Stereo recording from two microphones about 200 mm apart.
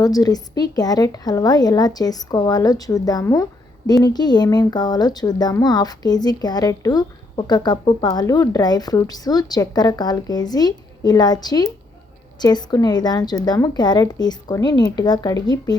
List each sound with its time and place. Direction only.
0.0 s speech: 20° left (ahead or behind)